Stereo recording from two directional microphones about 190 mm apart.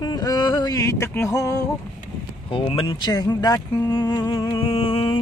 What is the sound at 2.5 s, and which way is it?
Speech, 30° left (ahead or behind).